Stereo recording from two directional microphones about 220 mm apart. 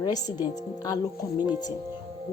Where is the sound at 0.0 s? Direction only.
20° left (ahead or behind).